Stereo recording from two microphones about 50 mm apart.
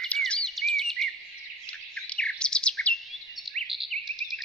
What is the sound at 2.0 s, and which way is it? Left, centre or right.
Bird, centre.